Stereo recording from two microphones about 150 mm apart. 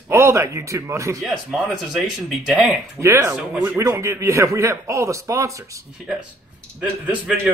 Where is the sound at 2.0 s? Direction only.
Centre (ahead or behind).